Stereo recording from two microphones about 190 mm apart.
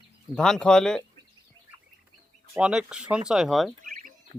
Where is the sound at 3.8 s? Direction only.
45° right (ahead or behind).